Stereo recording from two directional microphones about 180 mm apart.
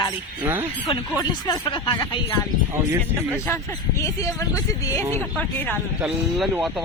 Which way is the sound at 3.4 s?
15° left (ahead or behind).